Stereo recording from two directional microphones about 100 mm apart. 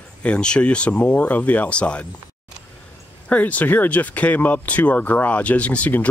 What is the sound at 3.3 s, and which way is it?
Speech, 15° left (ahead or behind).